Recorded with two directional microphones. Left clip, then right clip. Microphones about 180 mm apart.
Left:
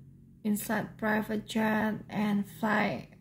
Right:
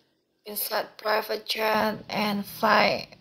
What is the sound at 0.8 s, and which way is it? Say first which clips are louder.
A woman's voice: right 9 dB; 15° left (ahead or behind).